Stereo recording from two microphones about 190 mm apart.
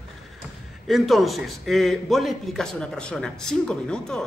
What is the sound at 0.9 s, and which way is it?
A man's voice, centre (ahead or behind).